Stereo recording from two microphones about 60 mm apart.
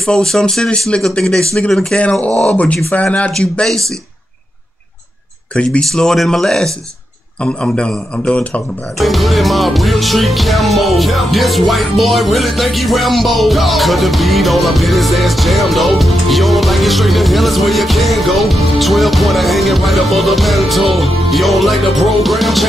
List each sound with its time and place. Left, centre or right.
0.0 s speech: centre
3.3 s speech: centre
5.5 s speech: centre
9.0 s music: centre